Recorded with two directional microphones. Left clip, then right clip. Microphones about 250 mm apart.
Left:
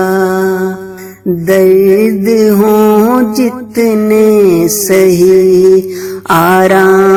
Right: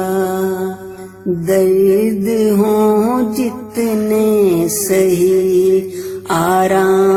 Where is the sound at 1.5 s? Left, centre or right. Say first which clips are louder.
Left 5 dB; left.